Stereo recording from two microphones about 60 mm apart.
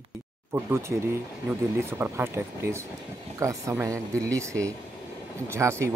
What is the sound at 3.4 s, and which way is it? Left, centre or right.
Speech, right.